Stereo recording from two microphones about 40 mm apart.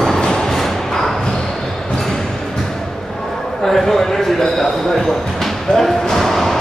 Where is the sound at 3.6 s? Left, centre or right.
Centre.